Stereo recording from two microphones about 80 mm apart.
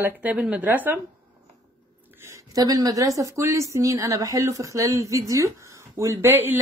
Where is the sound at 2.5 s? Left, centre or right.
Right.